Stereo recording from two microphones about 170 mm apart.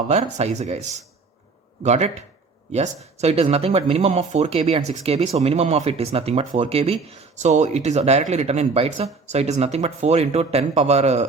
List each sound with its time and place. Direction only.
0.1 s speech: 40° right (ahead or behind)